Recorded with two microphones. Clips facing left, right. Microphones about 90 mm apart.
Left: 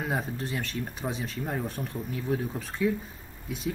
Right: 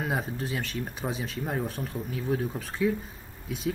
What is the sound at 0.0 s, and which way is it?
Speech, centre (ahead or behind).